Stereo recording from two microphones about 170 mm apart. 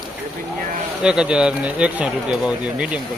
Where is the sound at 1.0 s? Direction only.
5° right (ahead or behind).